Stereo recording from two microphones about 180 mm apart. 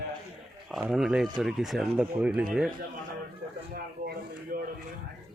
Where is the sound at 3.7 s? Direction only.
55° right (ahead or behind).